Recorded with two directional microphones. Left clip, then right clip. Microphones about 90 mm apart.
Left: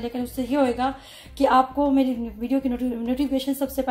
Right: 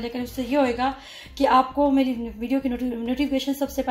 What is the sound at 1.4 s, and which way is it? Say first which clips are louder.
A woman's voice: even; 15° left (ahead or behind).